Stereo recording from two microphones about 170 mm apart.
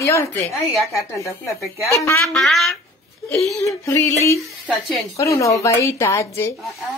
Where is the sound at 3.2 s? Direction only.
15° left (ahead or behind).